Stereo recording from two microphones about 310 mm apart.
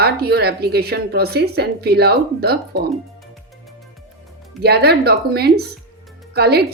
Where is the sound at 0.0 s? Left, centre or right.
Right.